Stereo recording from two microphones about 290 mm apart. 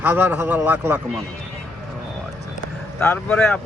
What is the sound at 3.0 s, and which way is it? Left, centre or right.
Speech, centre.